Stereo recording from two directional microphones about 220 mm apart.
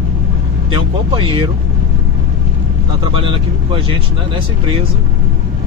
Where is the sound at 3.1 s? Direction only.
25° right (ahead or behind).